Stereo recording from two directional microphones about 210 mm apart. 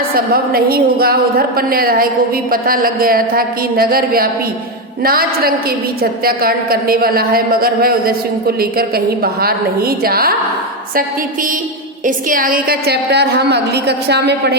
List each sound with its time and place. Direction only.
0.1 s a woman's voice: 45° right (ahead or behind)
12.0 s a woman's voice: 40° right (ahead or behind)